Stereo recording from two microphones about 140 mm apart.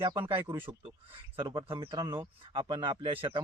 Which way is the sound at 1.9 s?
30° right (ahead or behind).